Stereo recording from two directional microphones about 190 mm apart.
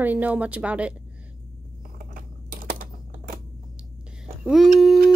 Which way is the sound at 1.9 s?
45° right (ahead or behind).